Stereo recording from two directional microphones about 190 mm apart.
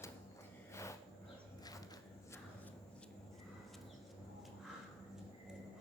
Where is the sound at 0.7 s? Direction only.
15° left (ahead or behind).